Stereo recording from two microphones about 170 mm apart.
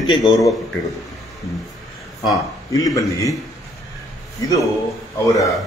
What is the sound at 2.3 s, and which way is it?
Speech, 20° left (ahead or behind).